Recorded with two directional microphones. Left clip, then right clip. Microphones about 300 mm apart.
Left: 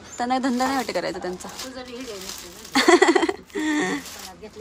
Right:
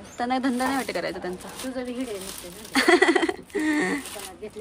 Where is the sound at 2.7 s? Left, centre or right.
Centre.